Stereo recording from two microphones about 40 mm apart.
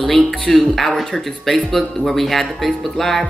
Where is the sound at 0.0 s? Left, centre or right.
Centre.